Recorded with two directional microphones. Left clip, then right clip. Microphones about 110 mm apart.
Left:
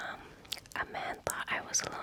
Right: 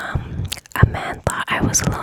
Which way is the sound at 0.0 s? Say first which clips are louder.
Right 13 dB; 50° right (ahead or behind).